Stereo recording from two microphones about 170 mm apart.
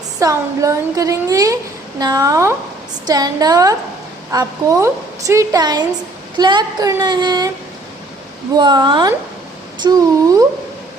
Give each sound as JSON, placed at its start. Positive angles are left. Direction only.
{"t": 0.2, "sound": "a woman's voice", "side_deg": -20}
{"t": 8.5, "sound": "a woman's voice", "side_deg": -25}